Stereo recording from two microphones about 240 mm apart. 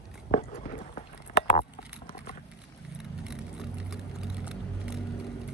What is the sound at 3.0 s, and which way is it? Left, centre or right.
Vehicle, centre.